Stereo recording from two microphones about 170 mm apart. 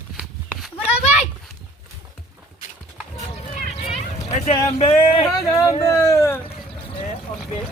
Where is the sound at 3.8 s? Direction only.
40° left (ahead or behind).